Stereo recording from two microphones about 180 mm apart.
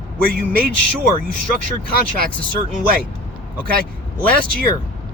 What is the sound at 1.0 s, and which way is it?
Speech, 50° right (ahead or behind).